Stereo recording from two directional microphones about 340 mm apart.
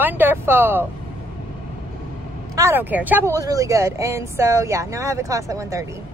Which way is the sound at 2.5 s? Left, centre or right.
Centre.